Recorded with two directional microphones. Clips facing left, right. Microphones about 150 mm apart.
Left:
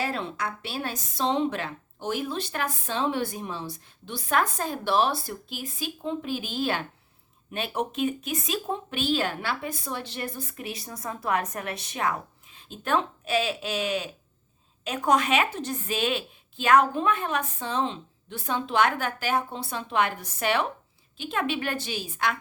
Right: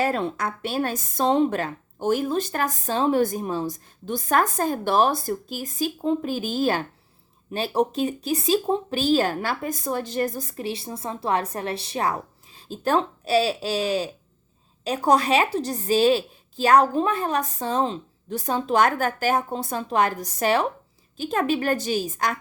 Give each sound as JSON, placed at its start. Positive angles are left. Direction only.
{"t": 0.0, "sound": "a woman's voice", "side_deg": -45}